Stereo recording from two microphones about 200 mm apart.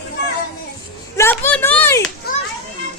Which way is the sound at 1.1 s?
15° left (ahead or behind).